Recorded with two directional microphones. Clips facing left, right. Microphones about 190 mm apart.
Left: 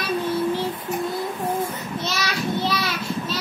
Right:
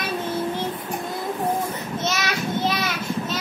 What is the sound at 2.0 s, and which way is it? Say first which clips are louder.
Child singing: right 1 dB; 20° right (ahead or behind).